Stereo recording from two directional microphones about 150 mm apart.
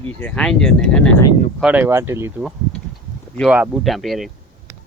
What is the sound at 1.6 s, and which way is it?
Speech, 10° right (ahead or behind).